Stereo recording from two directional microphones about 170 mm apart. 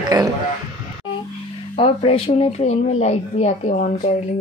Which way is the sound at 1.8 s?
35° left (ahead or behind).